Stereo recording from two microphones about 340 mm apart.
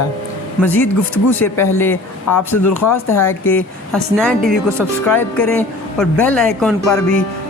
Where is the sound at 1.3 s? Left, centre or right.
Centre.